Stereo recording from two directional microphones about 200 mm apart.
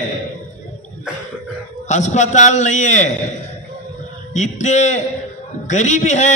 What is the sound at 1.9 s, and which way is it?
A man's voice, 35° left (ahead or behind).